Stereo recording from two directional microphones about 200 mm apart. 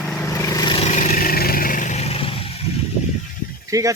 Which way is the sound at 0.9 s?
40° left (ahead or behind).